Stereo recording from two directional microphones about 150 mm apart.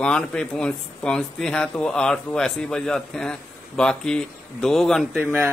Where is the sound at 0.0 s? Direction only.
5° left (ahead or behind).